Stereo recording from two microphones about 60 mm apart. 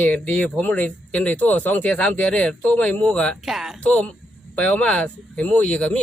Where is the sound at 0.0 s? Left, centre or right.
Left.